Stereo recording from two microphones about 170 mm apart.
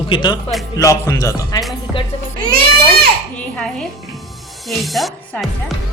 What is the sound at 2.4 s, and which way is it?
Baby cry, 60° right (ahead or behind).